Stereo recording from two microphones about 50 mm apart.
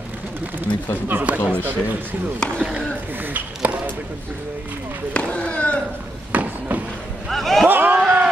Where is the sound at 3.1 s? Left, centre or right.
Right.